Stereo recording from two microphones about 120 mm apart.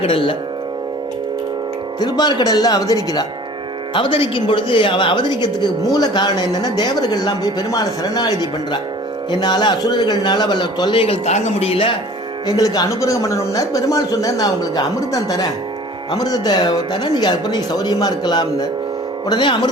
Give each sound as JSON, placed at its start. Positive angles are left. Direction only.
{"t": 0.0, "sound": "speech", "side_deg": 50}
{"t": 2.0, "sound": "speech", "side_deg": 35}
{"t": 3.9, "sound": "speech", "side_deg": 45}
{"t": 12.5, "sound": "speech", "side_deg": 30}